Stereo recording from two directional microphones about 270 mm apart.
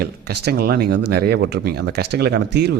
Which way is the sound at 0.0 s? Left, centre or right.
Right.